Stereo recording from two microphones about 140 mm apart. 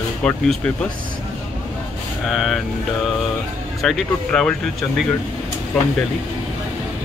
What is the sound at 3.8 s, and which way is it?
Speech, 5° left (ahead or behind).